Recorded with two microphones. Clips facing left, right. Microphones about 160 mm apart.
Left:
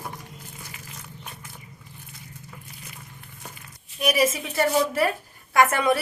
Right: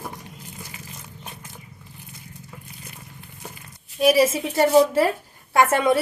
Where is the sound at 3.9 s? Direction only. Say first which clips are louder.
Right 5 dB; 30° right (ahead or behind).